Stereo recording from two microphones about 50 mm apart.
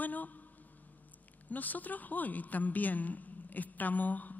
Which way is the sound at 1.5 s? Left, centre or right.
Left.